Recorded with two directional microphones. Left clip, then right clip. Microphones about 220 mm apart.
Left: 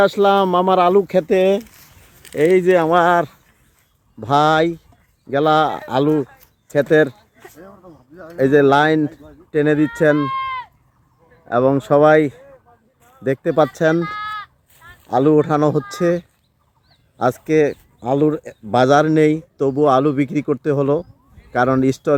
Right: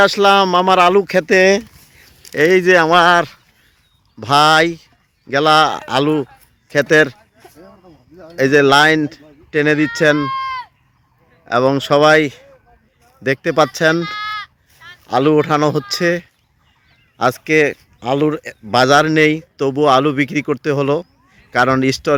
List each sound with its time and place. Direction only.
0.0 s speech: centre (ahead or behind)
1.4 s speech: 15° right (ahead or behind)
2.3 s speech: centre (ahead or behind)
8.4 s speech: centre (ahead or behind)
13.7 s speech: centre (ahead or behind)
14.2 s sheep: 25° left (ahead or behind)
15.0 s speech: centre (ahead or behind)